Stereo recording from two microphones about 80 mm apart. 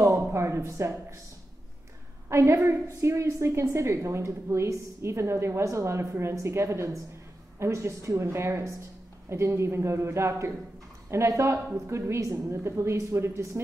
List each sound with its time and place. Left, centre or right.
0.3 s a woman's voice: right
2.2 s a woman's voice: right